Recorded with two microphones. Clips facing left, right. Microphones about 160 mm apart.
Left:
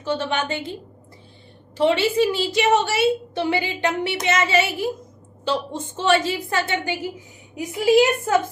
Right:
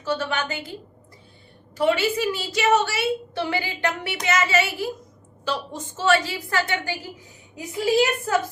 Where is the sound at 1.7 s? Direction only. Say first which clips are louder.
Left 3 dB; 25° left (ahead or behind).